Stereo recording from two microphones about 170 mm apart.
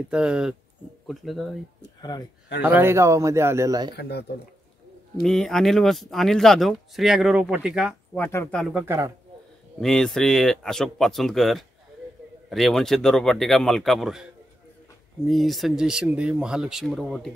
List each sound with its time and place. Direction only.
0.1 s speech: 5° right (ahead or behind)
2.0 s a sound: 25° left (ahead or behind)
2.6 s a man's voice: 10° right (ahead or behind)
3.9 s speech: 75° left (ahead or behind)
5.2 s speech: centre (ahead or behind)
8.2 s speech: 10° left (ahead or behind)
8.5 s speech: centre (ahead or behind)
8.8 s a man's voice: 15° right (ahead or behind)
9.8 s speech: 5° left (ahead or behind)
15.2 s speech: centre (ahead or behind)